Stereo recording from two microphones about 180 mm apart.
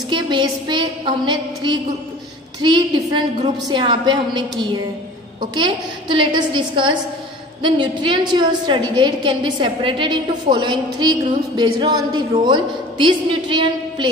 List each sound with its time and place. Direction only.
0.1 s a woman's voice: 25° right (ahead or behind)